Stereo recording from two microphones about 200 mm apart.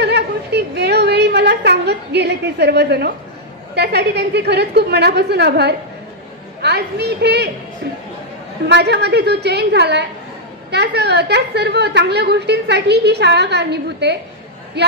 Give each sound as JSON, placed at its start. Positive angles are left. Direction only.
{"t": 0.0, "sound": "a sound", "side_deg": -55}
{"t": 3.7, "sound": "a woman's voice", "side_deg": -55}
{"t": 8.6, "sound": "a woman's voice", "side_deg": -55}